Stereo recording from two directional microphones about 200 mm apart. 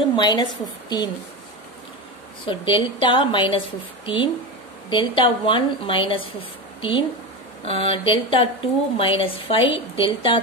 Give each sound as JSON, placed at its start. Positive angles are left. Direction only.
{"t": 0.1, "sound": "a woman's voice", "side_deg": 20}
{"t": 2.4, "sound": "a woman's voice", "side_deg": 25}